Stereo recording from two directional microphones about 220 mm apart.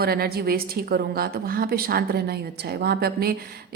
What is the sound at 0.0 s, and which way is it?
A woman's voice, 45° right (ahead or behind).